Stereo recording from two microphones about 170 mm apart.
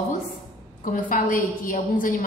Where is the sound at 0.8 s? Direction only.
50° left (ahead or behind).